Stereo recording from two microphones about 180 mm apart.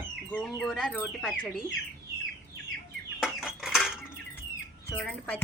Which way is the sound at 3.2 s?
Centre (ahead or behind).